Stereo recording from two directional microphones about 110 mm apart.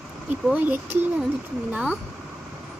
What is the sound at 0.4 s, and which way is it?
A child's voice, 15° right (ahead or behind).